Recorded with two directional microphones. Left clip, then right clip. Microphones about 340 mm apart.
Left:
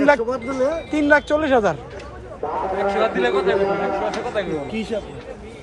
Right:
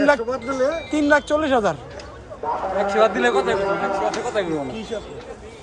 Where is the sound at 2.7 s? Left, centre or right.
Right.